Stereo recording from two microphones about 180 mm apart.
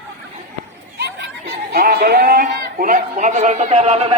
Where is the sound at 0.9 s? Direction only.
60° right (ahead or behind).